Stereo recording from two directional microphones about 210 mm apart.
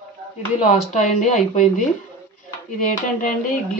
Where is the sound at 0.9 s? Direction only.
35° left (ahead or behind).